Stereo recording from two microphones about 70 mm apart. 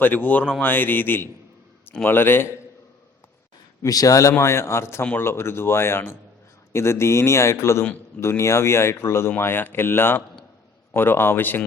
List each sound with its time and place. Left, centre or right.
0.0 s speech: left
3.8 s a man's voice: left